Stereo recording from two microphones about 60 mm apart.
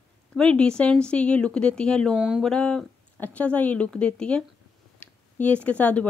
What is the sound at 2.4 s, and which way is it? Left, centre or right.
Speech, centre.